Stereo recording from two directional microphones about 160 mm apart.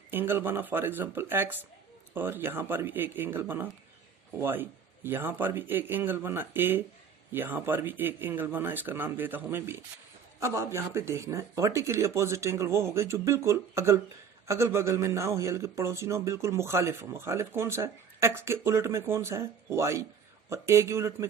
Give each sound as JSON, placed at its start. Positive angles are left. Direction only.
{"t": 0.1, "sound": "speech", "side_deg": -15}